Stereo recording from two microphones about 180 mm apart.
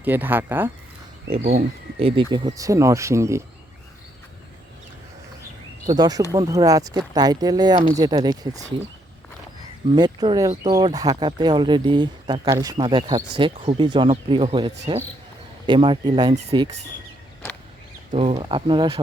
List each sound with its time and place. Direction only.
0.0 s speech: 10° right (ahead or behind)
1.3 s speech: 35° right (ahead or behind); by 3.4 s 15° right (ahead or behind)
5.9 s speech: 20° right (ahead or behind)
9.9 s speech: 25° right (ahead or behind)
18.3 s speech: 25° right (ahead or behind)